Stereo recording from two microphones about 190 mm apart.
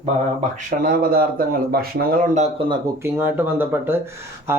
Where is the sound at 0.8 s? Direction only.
50° right (ahead or behind).